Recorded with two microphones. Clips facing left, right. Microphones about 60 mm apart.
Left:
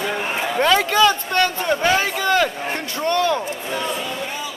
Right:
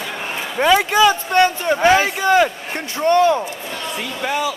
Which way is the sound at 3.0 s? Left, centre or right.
Right.